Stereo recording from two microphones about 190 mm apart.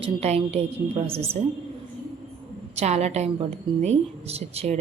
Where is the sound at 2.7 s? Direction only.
35° right (ahead or behind).